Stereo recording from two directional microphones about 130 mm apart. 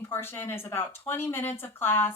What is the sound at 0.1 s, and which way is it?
A woman's voice, 15° left (ahead or behind).